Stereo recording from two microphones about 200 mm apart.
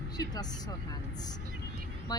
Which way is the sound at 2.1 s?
20° left (ahead or behind).